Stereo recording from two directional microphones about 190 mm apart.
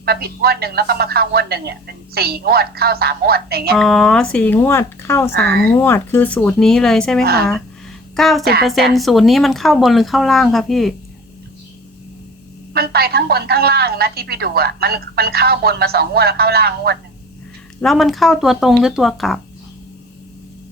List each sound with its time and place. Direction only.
0.0 s speech: 55° right (ahead or behind)
3.8 s speech: centre (ahead or behind)
7.2 s speech: 55° right (ahead or behind)
8.1 s speech: centre (ahead or behind)
12.7 s speech: 55° right (ahead or behind)
17.7 s speech: centre (ahead or behind)